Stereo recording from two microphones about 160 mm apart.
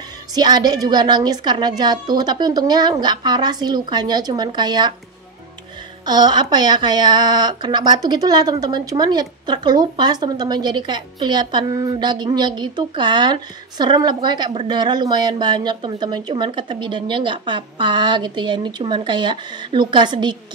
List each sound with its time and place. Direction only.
0.3 s speech: 25° right (ahead or behind)
6.0 s speech: 25° right (ahead or behind)